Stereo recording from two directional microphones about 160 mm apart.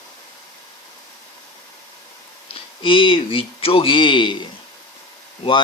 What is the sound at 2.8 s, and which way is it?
Speech, 35° left (ahead or behind).